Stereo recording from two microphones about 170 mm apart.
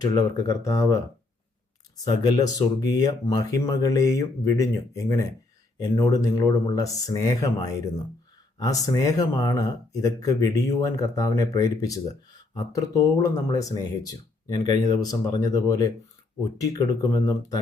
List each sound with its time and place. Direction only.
0.0 s speech: 20° left (ahead or behind)
2.0 s speech: 25° left (ahead or behind)